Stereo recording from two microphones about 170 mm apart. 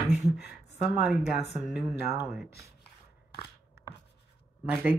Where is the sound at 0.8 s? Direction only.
5° right (ahead or behind).